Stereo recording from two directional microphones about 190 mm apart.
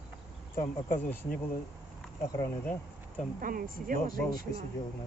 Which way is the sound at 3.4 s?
45° right (ahead or behind).